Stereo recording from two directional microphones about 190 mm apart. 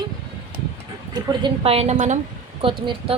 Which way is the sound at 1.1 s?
25° right (ahead or behind).